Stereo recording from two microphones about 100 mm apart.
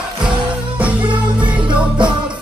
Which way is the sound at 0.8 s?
15° right (ahead or behind).